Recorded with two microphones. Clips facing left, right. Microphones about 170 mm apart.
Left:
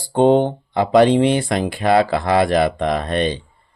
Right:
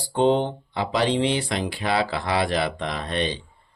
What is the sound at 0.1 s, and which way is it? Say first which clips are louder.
Speech: left 6 dB; 50° left (ahead or behind).